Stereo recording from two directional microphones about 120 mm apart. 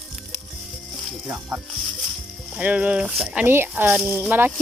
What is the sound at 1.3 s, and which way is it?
Music, 15° right (ahead or behind).